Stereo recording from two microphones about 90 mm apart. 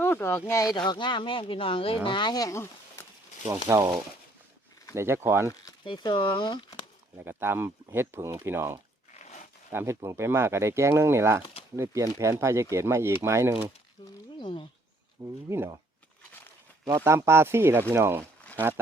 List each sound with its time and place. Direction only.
0.0 s speech: 30° left (ahead or behind)
0.8 s speech: 60° left (ahead or behind); by 2.0 s 90° left
2.0 s speech: 60° left (ahead or behind)
2.3 s speech: 40° left (ahead or behind)
3.8 s speech: 50° right (ahead or behind)
4.9 s speech: 30° right (ahead or behind)
5.8 s speech: 60° left (ahead or behind)
7.2 s speech: 25° right (ahead or behind)
14.3 s speech: 70° left (ahead or behind)
15.2 s speech: 30° right (ahead or behind)
17.0 s speech: 30° right (ahead or behind)